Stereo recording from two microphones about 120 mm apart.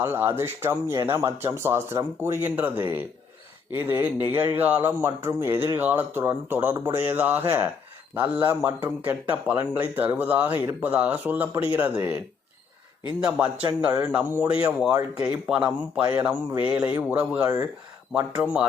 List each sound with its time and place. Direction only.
0.0 s a man's voice: 20° right (ahead or behind)
13.2 s a man's voice: 10° right (ahead or behind)